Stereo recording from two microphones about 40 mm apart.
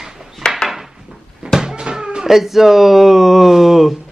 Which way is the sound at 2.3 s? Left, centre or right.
Centre.